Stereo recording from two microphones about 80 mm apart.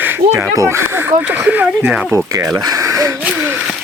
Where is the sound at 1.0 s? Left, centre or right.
Right.